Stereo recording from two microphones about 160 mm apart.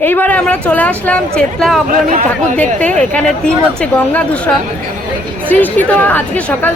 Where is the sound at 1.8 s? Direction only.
55° right (ahead or behind).